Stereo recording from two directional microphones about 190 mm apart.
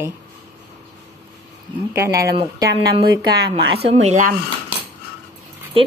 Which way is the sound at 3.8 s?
35° right (ahead or behind).